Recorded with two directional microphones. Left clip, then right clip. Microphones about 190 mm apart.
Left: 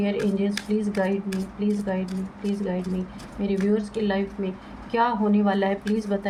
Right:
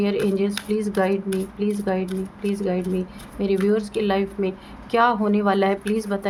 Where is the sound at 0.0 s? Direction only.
45° right (ahead or behind).